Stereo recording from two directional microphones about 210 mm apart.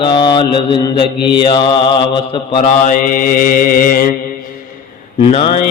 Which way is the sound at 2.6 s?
40° left (ahead or behind).